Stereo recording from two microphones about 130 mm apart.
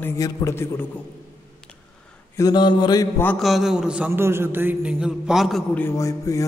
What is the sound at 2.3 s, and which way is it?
Mantra, 30° left (ahead or behind).